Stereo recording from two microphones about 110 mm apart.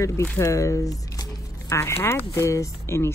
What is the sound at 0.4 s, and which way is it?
Speech, 30° left (ahead or behind).